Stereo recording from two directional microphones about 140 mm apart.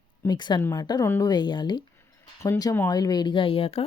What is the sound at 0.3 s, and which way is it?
A woman's voice, 30° left (ahead or behind).